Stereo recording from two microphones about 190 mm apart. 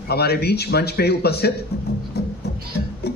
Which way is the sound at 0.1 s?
55° left (ahead or behind).